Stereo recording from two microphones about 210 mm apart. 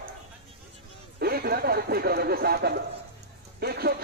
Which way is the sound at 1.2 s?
45° right (ahead or behind).